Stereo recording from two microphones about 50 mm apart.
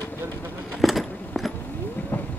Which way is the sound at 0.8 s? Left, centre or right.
Centre.